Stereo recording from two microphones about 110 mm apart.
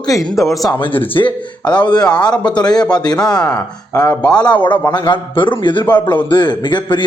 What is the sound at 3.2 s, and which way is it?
Speech, 35° left (ahead or behind).